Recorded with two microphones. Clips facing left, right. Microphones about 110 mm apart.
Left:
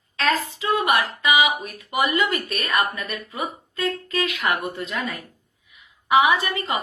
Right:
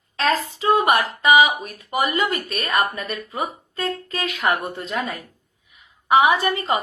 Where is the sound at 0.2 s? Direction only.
40° right (ahead or behind).